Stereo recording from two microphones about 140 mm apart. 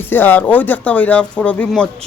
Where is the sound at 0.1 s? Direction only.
15° left (ahead or behind).